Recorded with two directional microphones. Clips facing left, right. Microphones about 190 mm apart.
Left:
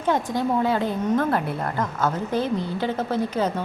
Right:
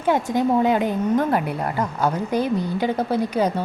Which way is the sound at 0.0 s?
15° right (ahead or behind).